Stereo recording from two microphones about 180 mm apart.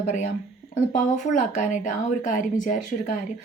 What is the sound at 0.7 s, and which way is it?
Speech, 45° left (ahead or behind).